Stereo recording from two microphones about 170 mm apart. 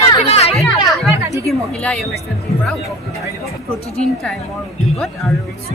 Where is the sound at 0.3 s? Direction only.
35° left (ahead or behind).